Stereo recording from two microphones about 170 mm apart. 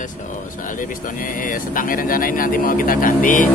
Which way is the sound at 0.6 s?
50° left (ahead or behind).